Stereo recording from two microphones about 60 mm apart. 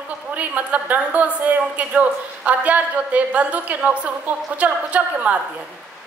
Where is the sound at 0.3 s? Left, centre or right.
Right.